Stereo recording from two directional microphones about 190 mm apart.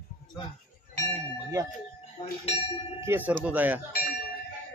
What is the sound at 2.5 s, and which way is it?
Speech, 30° left (ahead or behind).